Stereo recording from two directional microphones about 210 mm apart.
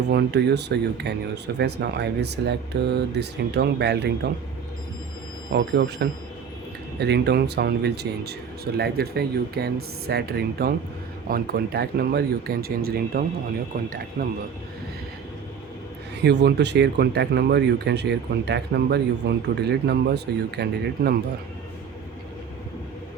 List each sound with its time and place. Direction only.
0.1 s speech: 55° right (ahead or behind)
5.5 s speech: 50° right (ahead or behind)
7.0 s speech: 55° right (ahead or behind)
16.2 s speech: 55° right (ahead or behind)